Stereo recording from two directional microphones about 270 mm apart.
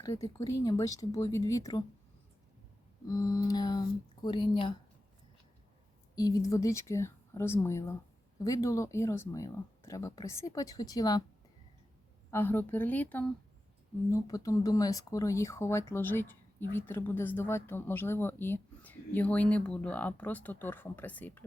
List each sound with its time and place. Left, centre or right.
0.0 s speech: centre
0.3 s speech: left
0.6 s speech: centre
3.1 s speech: centre
6.1 s speech: centre
12.3 s speech: centre